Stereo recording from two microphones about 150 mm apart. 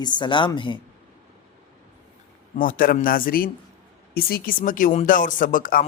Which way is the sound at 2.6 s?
70° left (ahead or behind).